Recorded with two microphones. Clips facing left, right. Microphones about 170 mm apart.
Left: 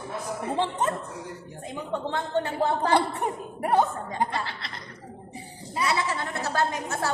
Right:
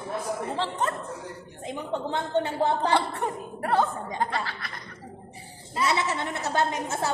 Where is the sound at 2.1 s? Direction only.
20° right (ahead or behind).